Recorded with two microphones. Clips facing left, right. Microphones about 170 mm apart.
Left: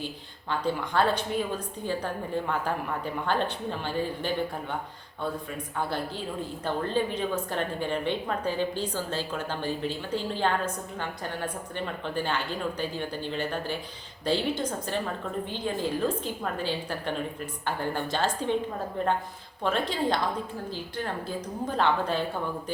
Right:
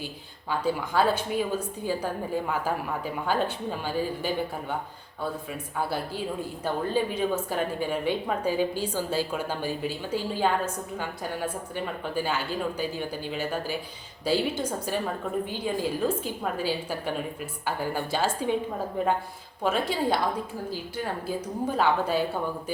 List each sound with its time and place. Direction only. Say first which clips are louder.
0.6 s a woman's voice: right 1 dB; 5° right (ahead or behind)
6.8 s a woman's voice: right 2 dB; 10° right (ahead or behind)